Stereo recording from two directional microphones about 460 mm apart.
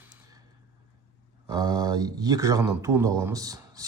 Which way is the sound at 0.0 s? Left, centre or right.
Centre.